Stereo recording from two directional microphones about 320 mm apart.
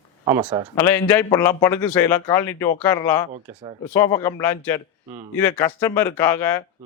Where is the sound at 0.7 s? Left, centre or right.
Centre.